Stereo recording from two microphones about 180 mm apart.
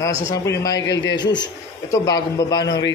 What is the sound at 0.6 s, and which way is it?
A man's voice, 20° left (ahead or behind).